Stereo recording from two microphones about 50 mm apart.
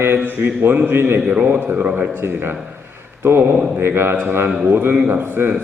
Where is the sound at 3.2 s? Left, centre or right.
Right.